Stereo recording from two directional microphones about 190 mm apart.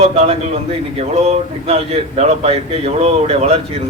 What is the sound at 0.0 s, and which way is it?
Speech, 30° right (ahead or behind).